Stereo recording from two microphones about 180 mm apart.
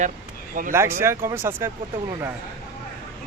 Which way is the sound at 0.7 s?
15° right (ahead or behind).